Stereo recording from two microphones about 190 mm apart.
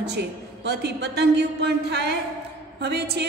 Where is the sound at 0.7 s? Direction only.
60° right (ahead or behind).